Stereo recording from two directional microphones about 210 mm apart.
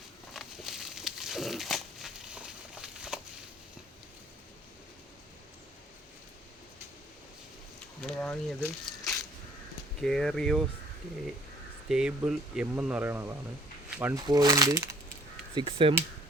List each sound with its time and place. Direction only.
0.3 s a sound: centre (ahead or behind)
8.0 s speech: 5° left (ahead or behind)
10.0 s speech: centre (ahead or behind)
11.9 s speech: 5° right (ahead or behind); by 16.0 s 25° right (ahead or behind)